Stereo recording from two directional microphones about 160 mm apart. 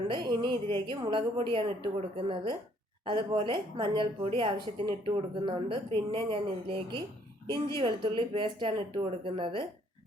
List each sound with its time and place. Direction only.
0.1 s a woman's voice: 30° right (ahead or behind)